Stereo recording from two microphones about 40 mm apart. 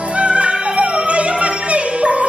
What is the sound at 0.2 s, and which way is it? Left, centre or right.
Music, right.